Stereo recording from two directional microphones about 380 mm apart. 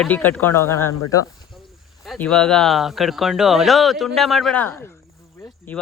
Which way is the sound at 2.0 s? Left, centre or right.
Centre.